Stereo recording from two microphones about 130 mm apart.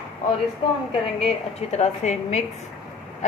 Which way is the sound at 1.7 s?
60° left (ahead or behind).